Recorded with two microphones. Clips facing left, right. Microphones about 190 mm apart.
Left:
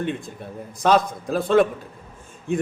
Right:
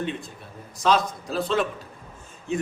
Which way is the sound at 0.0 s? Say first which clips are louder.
Left 3 dB; 55° left (ahead or behind).